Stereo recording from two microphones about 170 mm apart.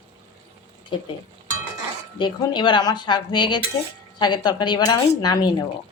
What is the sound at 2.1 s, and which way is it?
A woman's voice, 30° left (ahead or behind).